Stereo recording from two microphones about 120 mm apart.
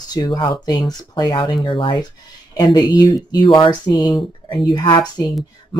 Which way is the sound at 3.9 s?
30° left (ahead or behind).